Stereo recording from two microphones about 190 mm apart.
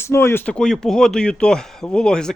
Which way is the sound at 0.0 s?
15° left (ahead or behind).